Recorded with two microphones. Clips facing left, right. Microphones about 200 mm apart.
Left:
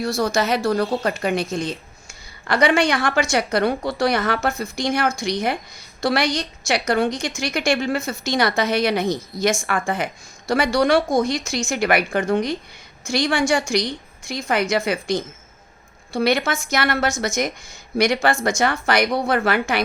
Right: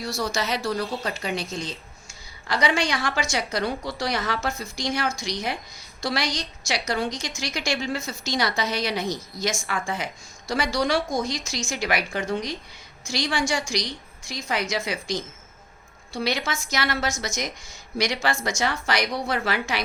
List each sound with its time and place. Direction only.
0.0 s a woman's voice: 55° left (ahead or behind)